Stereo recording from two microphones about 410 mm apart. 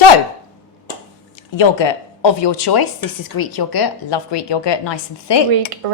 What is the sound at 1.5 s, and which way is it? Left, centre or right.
A woman's voice, left.